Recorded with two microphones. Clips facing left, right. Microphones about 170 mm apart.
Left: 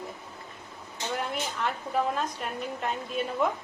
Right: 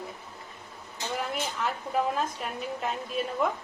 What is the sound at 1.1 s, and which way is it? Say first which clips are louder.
A woman's voice: even; centre (ahead or behind).